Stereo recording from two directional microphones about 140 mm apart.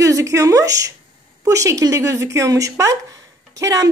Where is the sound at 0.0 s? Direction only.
20° right (ahead or behind).